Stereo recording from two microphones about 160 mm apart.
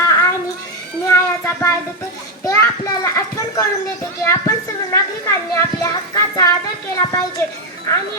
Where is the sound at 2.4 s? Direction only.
20° left (ahead or behind).